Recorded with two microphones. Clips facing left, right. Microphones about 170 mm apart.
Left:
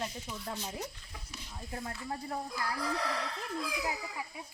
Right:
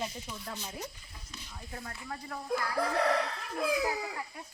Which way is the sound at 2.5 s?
60° right (ahead or behind).